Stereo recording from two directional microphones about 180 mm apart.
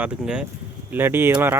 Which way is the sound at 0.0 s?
5° right (ahead or behind).